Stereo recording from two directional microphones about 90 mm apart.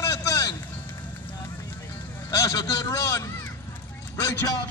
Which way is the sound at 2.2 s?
45° left (ahead or behind).